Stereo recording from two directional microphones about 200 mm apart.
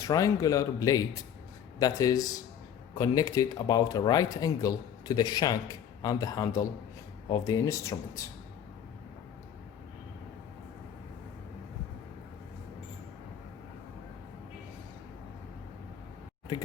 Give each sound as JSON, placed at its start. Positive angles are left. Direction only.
{"t": 0.0, "sound": "speech", "side_deg": 15}